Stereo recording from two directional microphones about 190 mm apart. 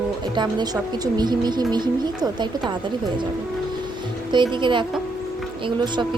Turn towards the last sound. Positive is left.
turn(degrees=-25)  # may be behind; listen again after turning